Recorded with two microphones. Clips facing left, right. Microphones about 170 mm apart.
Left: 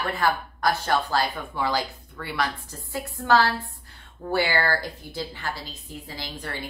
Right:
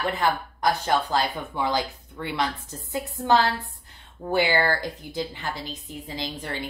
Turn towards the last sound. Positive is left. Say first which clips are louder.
# right 3 dB
turn(degrees=-20)  # may be behind; listen again after turning